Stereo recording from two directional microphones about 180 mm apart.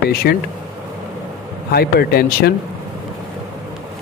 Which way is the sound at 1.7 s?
60° left (ahead or behind).